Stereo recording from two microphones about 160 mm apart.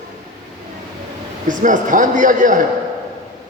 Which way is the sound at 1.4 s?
55° right (ahead or behind).